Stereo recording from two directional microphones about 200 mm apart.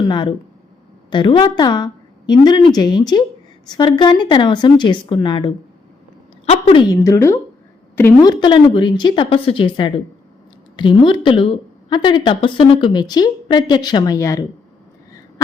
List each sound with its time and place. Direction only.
0.1 s a woman's voice: 25° left (ahead or behind)
6.9 s a woman's voice: 15° left (ahead or behind)